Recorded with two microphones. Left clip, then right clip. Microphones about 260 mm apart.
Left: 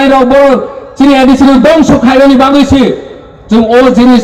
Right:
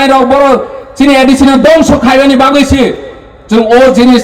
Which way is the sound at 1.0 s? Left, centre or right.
Right.